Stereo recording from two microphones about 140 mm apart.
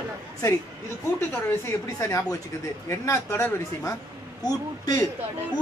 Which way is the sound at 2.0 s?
20° left (ahead or behind).